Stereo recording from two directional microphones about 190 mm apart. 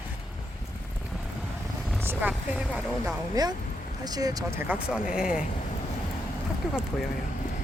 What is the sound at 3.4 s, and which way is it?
Speech, 20° right (ahead or behind).